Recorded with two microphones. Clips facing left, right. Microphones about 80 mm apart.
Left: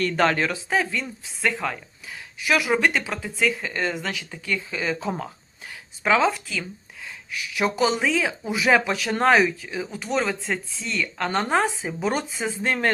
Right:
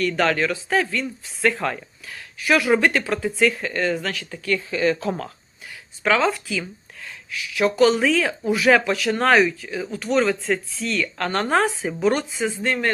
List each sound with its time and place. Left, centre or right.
0.0 s speech: left
0.7 s speech: centre
1.4 s speech: centre
2.0 s speech: centre
2.5 s speech: centre
3.6 s speech: centre
6.2 s speech: centre
7.3 s speech: left; by 11.9 s centre
12.0 s speech: centre
12.5 s speech: left